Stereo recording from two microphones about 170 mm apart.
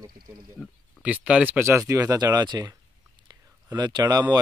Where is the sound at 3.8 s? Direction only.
25° right (ahead or behind).